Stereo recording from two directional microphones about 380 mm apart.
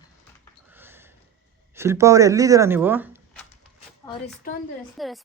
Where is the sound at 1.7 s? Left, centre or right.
Centre.